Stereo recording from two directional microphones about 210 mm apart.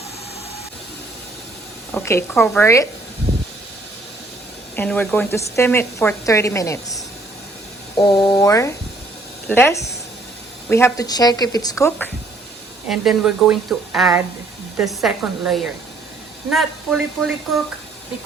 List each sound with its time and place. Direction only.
1.9 s a woman's voice: 10° left (ahead or behind)
4.8 s a woman's voice: 10° left (ahead or behind)
12.9 s a woman's voice: centre (ahead or behind)